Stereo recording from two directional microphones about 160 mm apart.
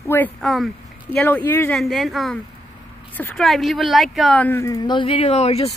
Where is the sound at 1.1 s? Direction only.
10° left (ahead or behind).